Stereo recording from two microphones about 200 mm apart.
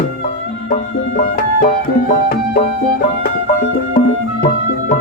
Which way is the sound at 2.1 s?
45° left (ahead or behind).